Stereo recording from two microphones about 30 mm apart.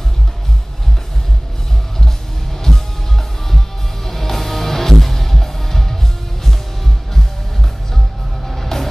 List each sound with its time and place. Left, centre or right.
2.7 s music: centre
8.5 s music: centre